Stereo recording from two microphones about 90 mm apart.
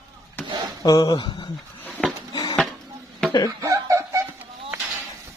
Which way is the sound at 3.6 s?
35° right (ahead or behind).